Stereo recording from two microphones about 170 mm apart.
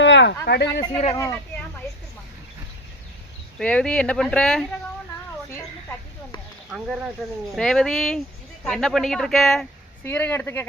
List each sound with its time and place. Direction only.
0.0 s a sound: 90° left
0.4 s speech: 75° left (ahead or behind)
0.8 s speech: 35° left (ahead or behind)
3.6 s speech: 5° left (ahead or behind)
6.7 s speech: centre (ahead or behind)